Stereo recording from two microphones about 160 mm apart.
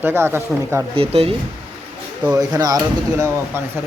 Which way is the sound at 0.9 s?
35° right (ahead or behind).